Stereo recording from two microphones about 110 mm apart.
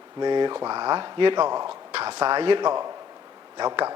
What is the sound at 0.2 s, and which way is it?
Speech, 45° right (ahead or behind).